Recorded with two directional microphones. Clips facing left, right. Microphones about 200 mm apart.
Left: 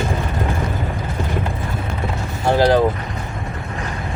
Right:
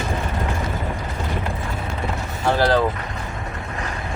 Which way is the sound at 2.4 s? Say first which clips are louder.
Left 4 dB; 15° left (ahead or behind).